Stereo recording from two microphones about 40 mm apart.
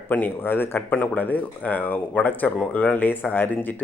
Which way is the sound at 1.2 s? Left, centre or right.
Left.